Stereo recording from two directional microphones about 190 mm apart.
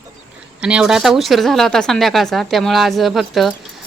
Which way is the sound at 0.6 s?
5° right (ahead or behind).